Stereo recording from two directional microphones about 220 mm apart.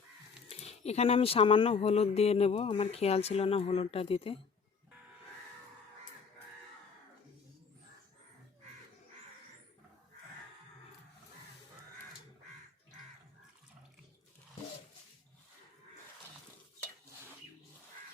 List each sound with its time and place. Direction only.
0.4 s speech: 30° left (ahead or behind)